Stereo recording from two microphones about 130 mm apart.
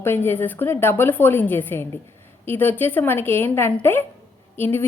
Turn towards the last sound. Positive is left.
turn(degrees=15)  # may be behind; listen again after turning